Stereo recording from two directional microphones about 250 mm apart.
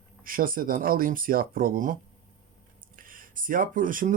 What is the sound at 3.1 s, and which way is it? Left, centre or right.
Speech, right.